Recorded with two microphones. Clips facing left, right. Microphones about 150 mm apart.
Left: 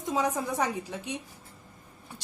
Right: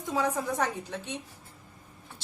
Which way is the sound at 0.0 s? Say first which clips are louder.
Left 1 dB; 20° left (ahead or behind).